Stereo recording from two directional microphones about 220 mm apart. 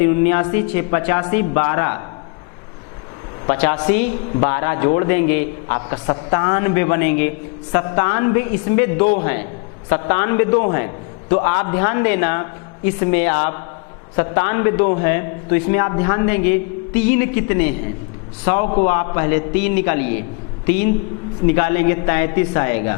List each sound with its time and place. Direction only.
0.0 s a man's voice: 15° left (ahead or behind)
3.4 s a man's voice: 15° left (ahead or behind)